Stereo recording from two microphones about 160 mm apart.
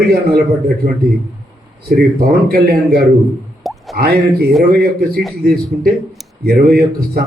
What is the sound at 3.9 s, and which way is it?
Speech, 75° right (ahead or behind).